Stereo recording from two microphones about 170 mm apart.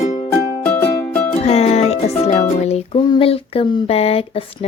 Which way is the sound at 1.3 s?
35° left (ahead or behind).